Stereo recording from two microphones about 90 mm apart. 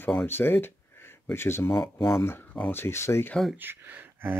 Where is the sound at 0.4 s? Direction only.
25° left (ahead or behind).